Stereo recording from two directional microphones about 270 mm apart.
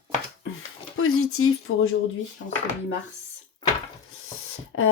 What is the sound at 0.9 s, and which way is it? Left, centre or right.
Speech, left.